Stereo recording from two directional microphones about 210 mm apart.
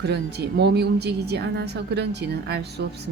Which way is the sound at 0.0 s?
50° right (ahead or behind).